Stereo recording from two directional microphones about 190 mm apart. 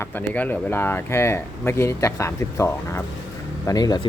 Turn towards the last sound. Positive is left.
turn(degrees=20)  # may be behind; listen again after turning